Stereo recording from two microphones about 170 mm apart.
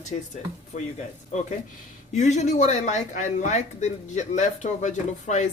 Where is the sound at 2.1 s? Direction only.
45° left (ahead or behind).